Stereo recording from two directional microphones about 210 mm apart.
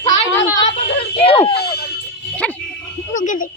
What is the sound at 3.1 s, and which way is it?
Speech, 35° left (ahead or behind).